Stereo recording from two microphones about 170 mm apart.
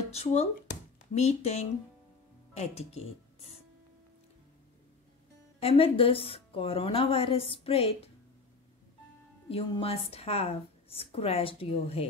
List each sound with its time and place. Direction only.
0.1 s a woman's voice: 40° left (ahead or behind)
5.6 s a woman's voice: 35° left (ahead or behind)
9.5 s a woman's voice: 35° left (ahead or behind)